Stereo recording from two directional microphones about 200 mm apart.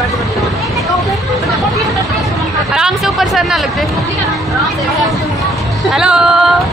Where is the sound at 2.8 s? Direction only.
Centre (ahead or behind).